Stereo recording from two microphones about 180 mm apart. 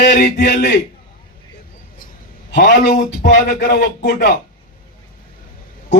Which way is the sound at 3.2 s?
65° left (ahead or behind).